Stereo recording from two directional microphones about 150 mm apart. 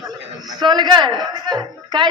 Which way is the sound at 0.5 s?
30° right (ahead or behind).